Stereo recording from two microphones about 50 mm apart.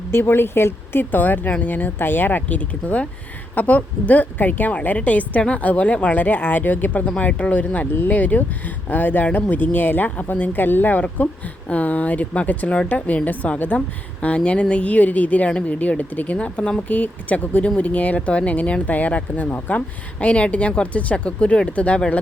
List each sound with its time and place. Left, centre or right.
0.1 s speech: left
1.1 s speech: left
21.9 s speech: centre